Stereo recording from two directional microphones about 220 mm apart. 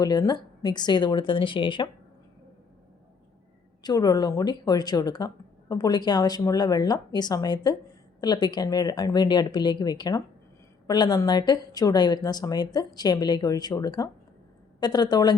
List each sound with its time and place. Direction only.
0.0 s a woman's voice: 20° left (ahead or behind)
3.8 s a woman's voice: 15° left (ahead or behind)